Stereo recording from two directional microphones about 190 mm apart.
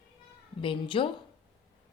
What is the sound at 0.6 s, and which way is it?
Speech, 25° left (ahead or behind).